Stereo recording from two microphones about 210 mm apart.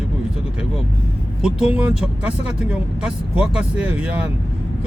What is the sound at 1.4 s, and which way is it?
Speech, 5° right (ahead or behind).